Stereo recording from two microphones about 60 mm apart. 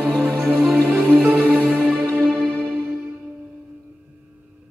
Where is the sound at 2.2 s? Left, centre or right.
Centre.